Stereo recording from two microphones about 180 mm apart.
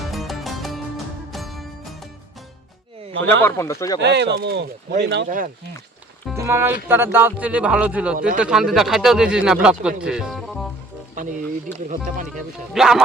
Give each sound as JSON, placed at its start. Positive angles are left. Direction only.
{"t": 0.0, "sound": "music", "side_deg": 0}
{"t": 3.4, "sound": "speech", "side_deg": 15}
{"t": 4.0, "sound": "speech", "side_deg": -70}
{"t": 6.3, "sound": "a man's voice", "side_deg": -15}
{"t": 11.9, "sound": "speech", "side_deg": -45}
{"t": 12.3, "sound": "speech", "side_deg": 0}